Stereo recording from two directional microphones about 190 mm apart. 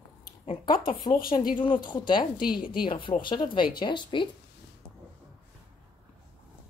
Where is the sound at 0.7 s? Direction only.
25° left (ahead or behind).